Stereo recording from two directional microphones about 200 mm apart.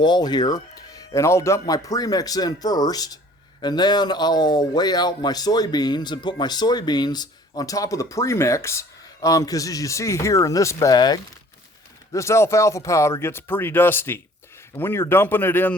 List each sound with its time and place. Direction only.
0.0 s speech: 20° left (ahead or behind)